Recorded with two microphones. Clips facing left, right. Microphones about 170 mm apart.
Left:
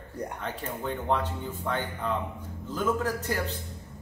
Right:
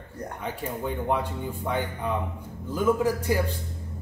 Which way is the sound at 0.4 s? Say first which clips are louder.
Right 3 dB; 10° right (ahead or behind).